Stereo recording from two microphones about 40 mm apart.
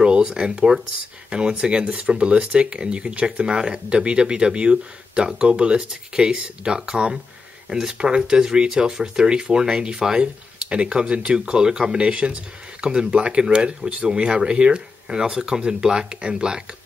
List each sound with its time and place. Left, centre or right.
0.0 s speech: right